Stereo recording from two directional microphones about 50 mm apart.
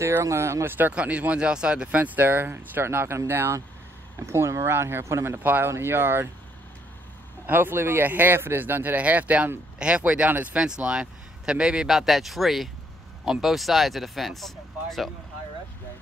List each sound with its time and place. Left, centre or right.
0.2 s speech: right
0.7 s speech: right
0.9 s speech: right
2.0 s speech: right
4.3 s speech: right
5.4 s speech: right
5.7 s speech: right
7.4 s speech: right
8.1 s speech: right; by 11.9 s centre
11.9 s speech: centre